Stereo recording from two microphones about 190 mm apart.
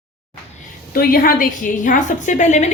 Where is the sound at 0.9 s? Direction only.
50° left (ahead or behind).